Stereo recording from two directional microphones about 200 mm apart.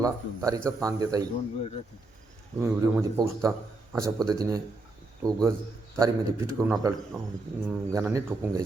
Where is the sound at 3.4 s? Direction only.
15° right (ahead or behind).